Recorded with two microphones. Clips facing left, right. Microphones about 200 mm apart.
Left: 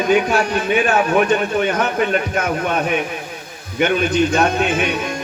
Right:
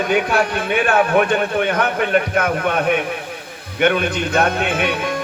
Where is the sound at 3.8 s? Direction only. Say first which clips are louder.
Left 1 dB; 55° right (ahead or behind).